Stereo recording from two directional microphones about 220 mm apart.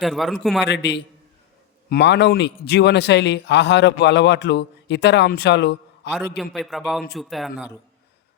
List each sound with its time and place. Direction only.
0.0 s a man's voice: centre (ahead or behind)
0.7 s speech: 50° left (ahead or behind)
6.3 s a man's voice: centre (ahead or behind)